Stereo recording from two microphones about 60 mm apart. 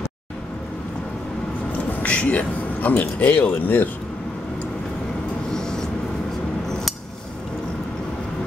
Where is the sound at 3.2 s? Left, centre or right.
Left.